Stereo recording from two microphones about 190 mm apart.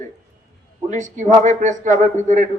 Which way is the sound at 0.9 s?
40° right (ahead or behind).